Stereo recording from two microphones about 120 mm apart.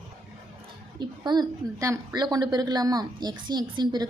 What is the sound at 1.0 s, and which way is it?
A woman's voice, 35° right (ahead or behind).